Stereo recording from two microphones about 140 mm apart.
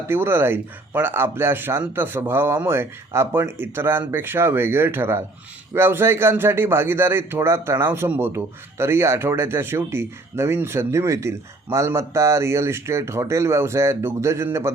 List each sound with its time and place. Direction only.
0.1 s a man's voice: 15° right (ahead or behind)